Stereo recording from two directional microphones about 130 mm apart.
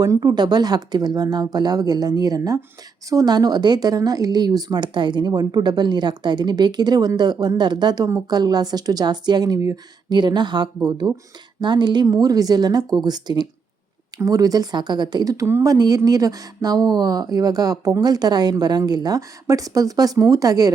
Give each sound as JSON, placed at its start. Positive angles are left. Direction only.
{"t": 0.0, "sound": "speech", "side_deg": -25}